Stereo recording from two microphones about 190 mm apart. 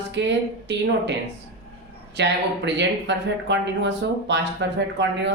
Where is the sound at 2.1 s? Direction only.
65° right (ahead or behind).